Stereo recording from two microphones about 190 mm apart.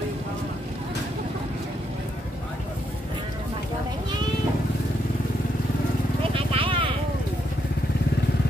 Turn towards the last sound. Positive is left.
turn(degrees=-30)  # may be behind; listen again after turning